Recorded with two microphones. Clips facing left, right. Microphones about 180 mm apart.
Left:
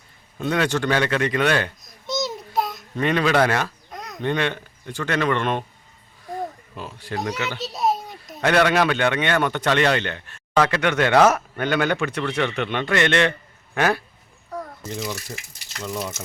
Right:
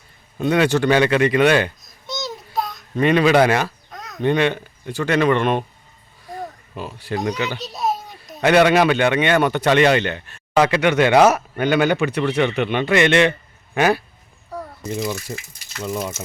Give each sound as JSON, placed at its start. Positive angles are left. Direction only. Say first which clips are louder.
{"t": 0.3, "sound": "a child's voice", "louder": "right 5 dB", "side_deg": -10}
{"t": 6.7, "sound": "speech", "louder": "right 4 dB", "side_deg": -5}
{"t": 7.5, "sound": "babbling", "louder": "left 1 dB", "side_deg": 0}
{"t": 8.4, "sound": "speech", "louder": "right 4 dB", "side_deg": -5}
{"t": 14.5, "sound": "a sound", "louder": "right 3 dB", "side_deg": -10}
{"t": 16.0, "sound": "speech", "louder": "right 1 dB", "side_deg": -5}